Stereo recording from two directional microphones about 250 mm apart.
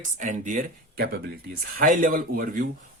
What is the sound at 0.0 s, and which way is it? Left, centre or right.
Speech, right.